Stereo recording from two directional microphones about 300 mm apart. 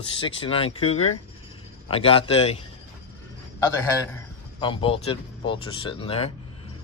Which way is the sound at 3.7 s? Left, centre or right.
Centre.